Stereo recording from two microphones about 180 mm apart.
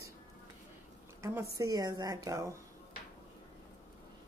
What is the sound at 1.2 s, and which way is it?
A woman's voice, 20° right (ahead or behind).